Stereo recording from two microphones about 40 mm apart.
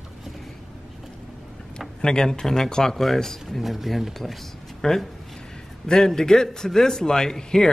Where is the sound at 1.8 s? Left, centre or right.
Centre.